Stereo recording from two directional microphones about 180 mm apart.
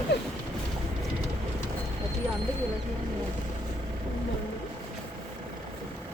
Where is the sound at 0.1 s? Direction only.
70° left (ahead or behind).